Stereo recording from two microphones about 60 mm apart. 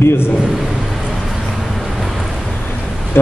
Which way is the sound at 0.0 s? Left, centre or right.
Left.